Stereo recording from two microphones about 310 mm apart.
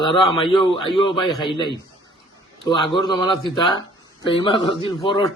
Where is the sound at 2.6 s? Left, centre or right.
Centre.